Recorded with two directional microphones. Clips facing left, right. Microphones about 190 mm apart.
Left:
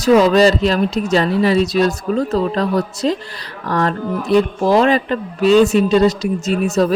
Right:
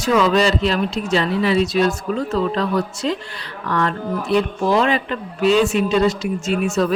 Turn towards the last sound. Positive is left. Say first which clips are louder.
# left 3 dB
turn(degrees=40)  # may be behind; listen again after turning